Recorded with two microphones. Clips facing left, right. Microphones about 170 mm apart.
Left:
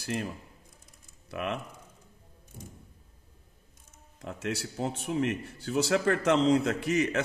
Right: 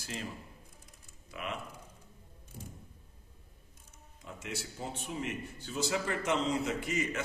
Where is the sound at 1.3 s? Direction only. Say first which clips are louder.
Left 7 dB; 80° left.